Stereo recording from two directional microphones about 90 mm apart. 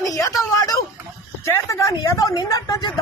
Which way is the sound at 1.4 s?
35° left (ahead or behind).